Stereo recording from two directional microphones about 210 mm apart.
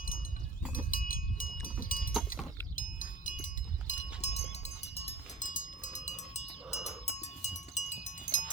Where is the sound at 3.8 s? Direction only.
30° left (ahead or behind).